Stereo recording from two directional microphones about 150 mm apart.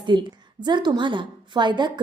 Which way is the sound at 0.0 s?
30° right (ahead or behind).